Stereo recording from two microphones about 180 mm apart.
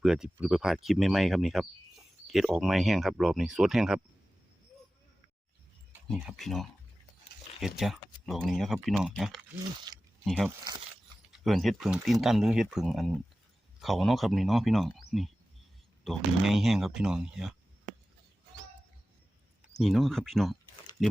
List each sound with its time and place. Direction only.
0.0 s speech: 5° right (ahead or behind)
6.1 s speech: centre (ahead or behind)
9.9 s speech: 20° right (ahead or behind)
10.2 s speech: centre (ahead or behind)
19.7 s speech: centre (ahead or behind)